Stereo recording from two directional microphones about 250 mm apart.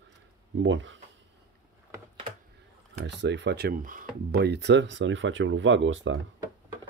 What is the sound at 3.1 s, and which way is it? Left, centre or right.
Speech, right.